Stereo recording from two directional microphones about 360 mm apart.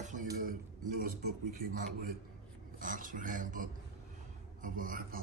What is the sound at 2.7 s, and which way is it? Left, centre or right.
A man's voice, right.